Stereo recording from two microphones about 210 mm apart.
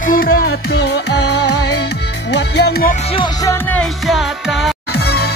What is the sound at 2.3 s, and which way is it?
Speech, 50° left (ahead or behind).